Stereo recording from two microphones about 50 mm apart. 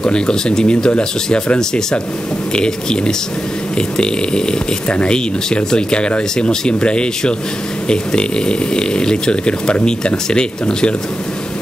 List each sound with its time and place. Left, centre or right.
0.0 s speech: centre